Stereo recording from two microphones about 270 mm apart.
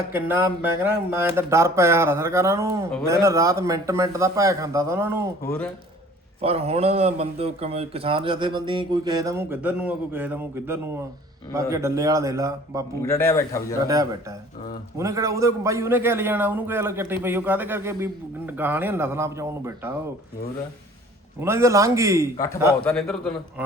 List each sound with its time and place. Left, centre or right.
0.1 s a man's voice: centre
5.5 s a man's voice: centre
6.4 s a man's voice: right
13.0 s a man's voice: centre
13.8 s a man's voice: centre
21.4 s a man's voice: centre
22.8 s a man's voice: centre